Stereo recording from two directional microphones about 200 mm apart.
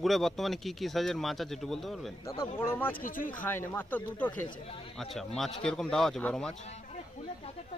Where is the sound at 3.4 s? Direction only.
10° left (ahead or behind).